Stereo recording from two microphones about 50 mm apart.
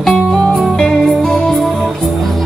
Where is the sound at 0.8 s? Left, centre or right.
Centre.